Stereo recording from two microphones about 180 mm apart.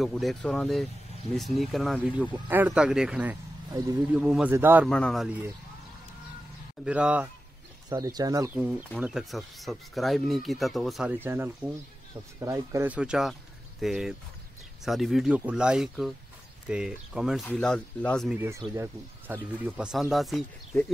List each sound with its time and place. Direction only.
0.0 s a man's voice: centre (ahead or behind)
4.8 s speech: 5° left (ahead or behind)
6.8 s a man's voice: 5° right (ahead or behind)
7.9 s speech: 20° right (ahead or behind)
8.6 s speech: 5° right (ahead or behind)
11.2 s a man's voice: 15° right (ahead or behind); by 18.3 s 5° left (ahead or behind)
18.3 s a man's voice: 15° right (ahead or behind)